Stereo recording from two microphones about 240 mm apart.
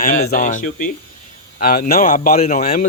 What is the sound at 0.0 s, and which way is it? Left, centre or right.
Speech, left.